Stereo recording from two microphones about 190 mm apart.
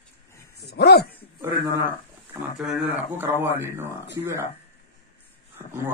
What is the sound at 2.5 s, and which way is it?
Speech, 5° right (ahead or behind).